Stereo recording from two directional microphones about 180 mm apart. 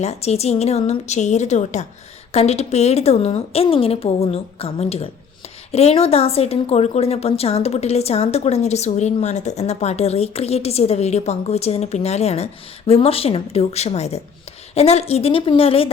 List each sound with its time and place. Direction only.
0.0 s a woman's voice: 35° left (ahead or behind)